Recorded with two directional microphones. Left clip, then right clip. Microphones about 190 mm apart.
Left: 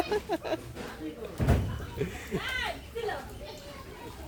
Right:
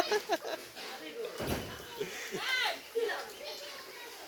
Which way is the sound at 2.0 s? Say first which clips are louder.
Left 4 dB; 10° left (ahead or behind).